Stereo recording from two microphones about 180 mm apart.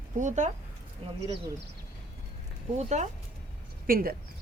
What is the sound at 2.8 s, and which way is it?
Speech, 40° right (ahead or behind).